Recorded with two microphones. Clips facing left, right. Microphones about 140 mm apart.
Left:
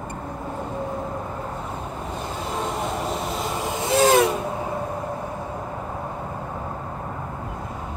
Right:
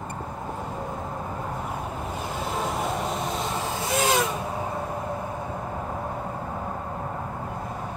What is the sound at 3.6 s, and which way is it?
Vehicle, 25° left (ahead or behind).